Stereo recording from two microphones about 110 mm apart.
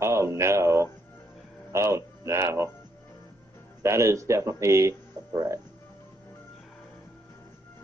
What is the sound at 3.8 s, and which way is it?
Speech, 25° right (ahead or behind).